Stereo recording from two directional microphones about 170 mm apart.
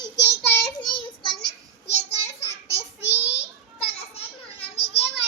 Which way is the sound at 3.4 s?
35° left (ahead or behind).